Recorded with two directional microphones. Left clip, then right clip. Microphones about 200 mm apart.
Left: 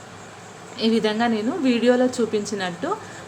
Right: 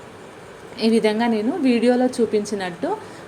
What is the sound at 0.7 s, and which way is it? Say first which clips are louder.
A woman's voice: right 2 dB; centre (ahead or behind).